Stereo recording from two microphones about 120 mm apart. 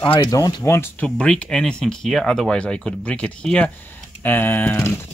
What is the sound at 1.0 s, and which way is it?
Speech, 10° left (ahead or behind).